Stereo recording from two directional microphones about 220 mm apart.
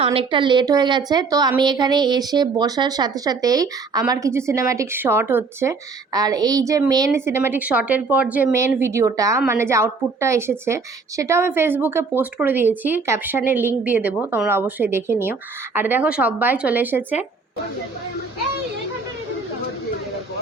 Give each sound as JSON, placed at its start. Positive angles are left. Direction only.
{"t": 0.0, "sound": "a woman's voice", "side_deg": -25}